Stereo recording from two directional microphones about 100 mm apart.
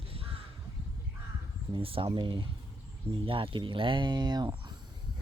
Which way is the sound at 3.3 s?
65° right (ahead or behind).